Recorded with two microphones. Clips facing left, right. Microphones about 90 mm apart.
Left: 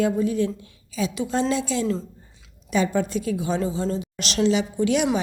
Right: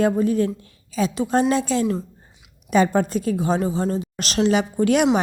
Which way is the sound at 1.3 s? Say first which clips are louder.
Right 5 dB; 45° right (ahead or behind).